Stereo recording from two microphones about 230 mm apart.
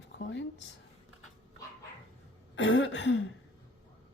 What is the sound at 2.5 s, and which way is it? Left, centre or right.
Speech, left.